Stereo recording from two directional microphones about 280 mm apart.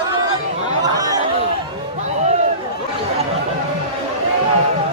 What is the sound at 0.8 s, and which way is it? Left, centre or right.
Chatter, centre.